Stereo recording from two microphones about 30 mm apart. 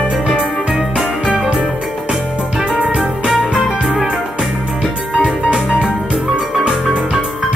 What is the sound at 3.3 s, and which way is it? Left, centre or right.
Music, centre.